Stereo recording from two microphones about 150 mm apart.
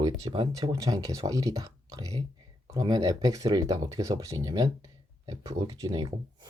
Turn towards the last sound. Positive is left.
turn(degrees=-25)  # may be behind; listen again after turning